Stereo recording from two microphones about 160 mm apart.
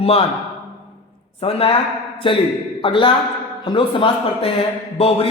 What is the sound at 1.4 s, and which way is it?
A woman's voice, 35° left (ahead or behind).